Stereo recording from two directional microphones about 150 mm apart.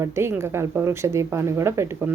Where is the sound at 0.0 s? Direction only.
15° right (ahead or behind).